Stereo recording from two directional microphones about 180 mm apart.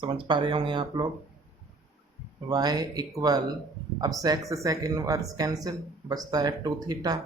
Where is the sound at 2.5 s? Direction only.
20° right (ahead or behind).